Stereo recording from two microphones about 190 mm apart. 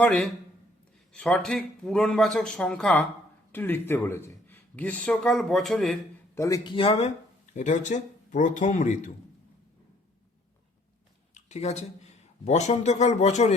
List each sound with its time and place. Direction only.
0.0 s speech: 5° left (ahead or behind)
6.3 s speech: 15° left (ahead or behind)
6.7 s speech: 30° left (ahead or behind)
11.3 s a sound: 35° left (ahead or behind)
12.5 s speech: 35° left (ahead or behind)